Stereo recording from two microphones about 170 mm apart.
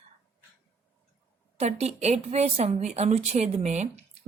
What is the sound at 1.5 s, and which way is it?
Speech, 40° right (ahead or behind).